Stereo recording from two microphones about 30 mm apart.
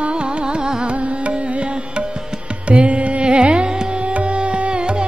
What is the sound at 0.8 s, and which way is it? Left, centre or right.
Music, right.